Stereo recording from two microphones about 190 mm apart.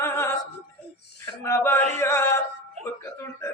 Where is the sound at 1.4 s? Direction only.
15° left (ahead or behind).